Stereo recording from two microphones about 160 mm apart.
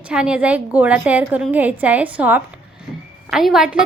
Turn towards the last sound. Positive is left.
turn(degrees=-5)  # may be behind; listen again after turning